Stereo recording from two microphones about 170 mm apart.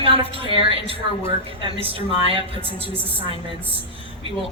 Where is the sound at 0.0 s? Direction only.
35° right (ahead or behind).